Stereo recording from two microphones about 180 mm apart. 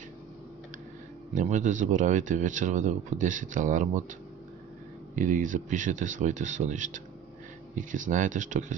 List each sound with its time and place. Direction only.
1.3 s speech: 45° right (ahead or behind)
5.1 s speech: 45° right (ahead or behind)